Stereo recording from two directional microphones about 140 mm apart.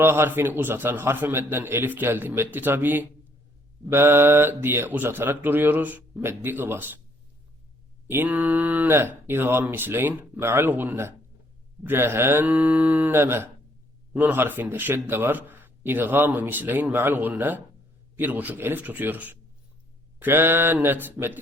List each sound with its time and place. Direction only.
0.0 s speech: 15° right (ahead or behind)
8.1 s speech: 10° right (ahead or behind)